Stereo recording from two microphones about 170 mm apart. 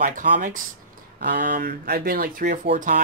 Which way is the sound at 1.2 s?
65° right (ahead or behind).